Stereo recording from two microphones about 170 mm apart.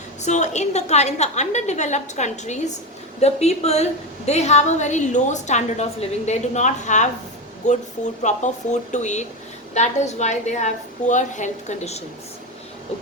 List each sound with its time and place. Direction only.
0.2 s a woman's voice: 45° left (ahead or behind)